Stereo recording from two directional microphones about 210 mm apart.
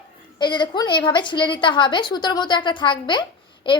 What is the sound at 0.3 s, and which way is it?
A woman's voice, 20° left (ahead or behind).